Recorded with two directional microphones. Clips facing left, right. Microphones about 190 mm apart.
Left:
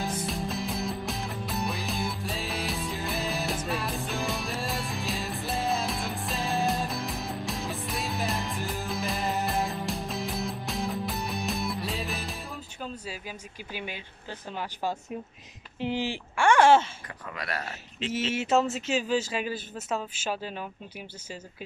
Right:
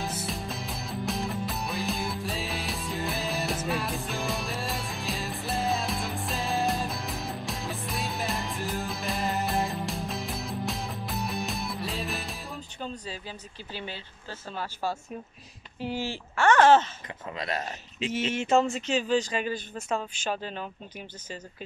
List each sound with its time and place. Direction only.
0.0 s music: 5° right (ahead or behind)
12.8 s a sound: 5° left (ahead or behind)
13.7 s speech: 15° left (ahead or behind)
17.3 s speech: 20° right (ahead or behind)
18.3 s speech: 5° left (ahead or behind)